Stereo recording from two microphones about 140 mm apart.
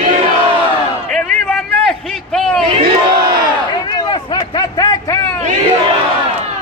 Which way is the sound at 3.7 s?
30° left (ahead or behind).